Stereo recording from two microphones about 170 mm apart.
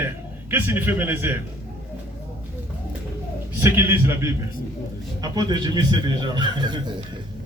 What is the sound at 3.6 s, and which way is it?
Speech, 15° right (ahead or behind).